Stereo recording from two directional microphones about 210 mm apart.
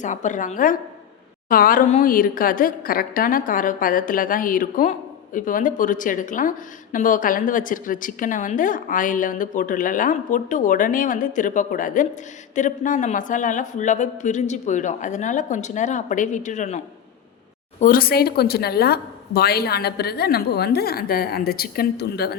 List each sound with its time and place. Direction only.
0.0 s a woman's voice: 35° left (ahead or behind)